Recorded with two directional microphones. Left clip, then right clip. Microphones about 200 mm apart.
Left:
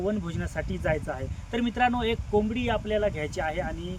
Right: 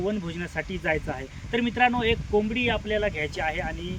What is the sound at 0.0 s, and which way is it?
Speech, 10° left (ahead or behind).